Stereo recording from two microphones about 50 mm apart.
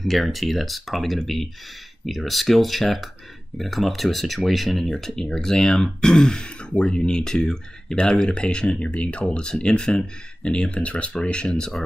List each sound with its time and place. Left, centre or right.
0.0 s speech: centre